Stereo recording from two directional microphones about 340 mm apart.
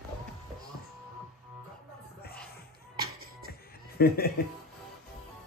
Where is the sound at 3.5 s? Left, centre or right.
Left.